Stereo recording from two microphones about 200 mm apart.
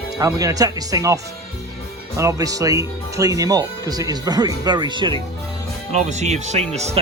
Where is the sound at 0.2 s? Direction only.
15° right (ahead or behind).